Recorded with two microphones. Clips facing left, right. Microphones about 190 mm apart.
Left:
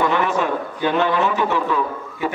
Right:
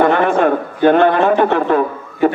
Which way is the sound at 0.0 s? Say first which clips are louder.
Right 7 dB; 55° right (ahead or behind).